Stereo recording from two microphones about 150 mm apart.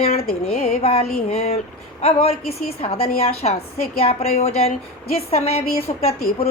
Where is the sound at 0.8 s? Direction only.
40° left (ahead or behind).